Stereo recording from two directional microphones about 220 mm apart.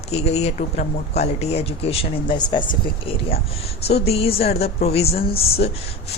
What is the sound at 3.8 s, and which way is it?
Speech, 30° left (ahead or behind).